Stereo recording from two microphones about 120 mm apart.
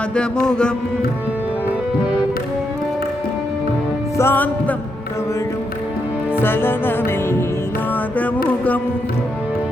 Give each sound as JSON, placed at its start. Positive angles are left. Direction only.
{"t": 0.2, "sound": "music", "side_deg": 10}
{"t": 4.2, "sound": "music", "side_deg": 15}
{"t": 6.3, "sound": "music", "side_deg": 20}